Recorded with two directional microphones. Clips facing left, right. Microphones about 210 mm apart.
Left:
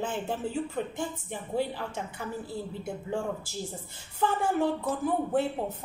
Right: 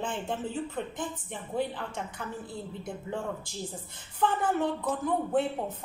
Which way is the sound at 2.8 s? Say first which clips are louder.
Left 2 dB; 10° left (ahead or behind).